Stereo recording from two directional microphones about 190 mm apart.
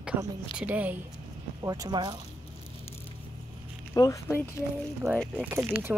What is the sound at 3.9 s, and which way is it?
Speech, 15° left (ahead or behind).